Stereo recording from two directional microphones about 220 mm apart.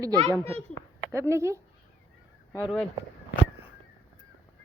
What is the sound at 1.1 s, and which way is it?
Speech, 10° right (ahead or behind).